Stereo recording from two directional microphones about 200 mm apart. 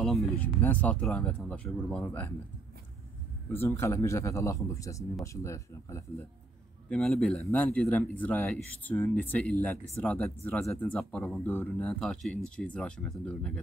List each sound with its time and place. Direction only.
0.0 s speech: 5° left (ahead or behind)
3.5 s speech: 10° left (ahead or behind)
6.9 s speech: 5° left (ahead or behind)